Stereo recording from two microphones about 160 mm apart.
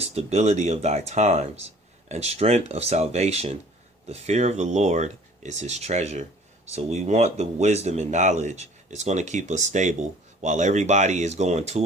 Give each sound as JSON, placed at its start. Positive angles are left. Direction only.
{"t": 0.0, "sound": "speech", "side_deg": -40}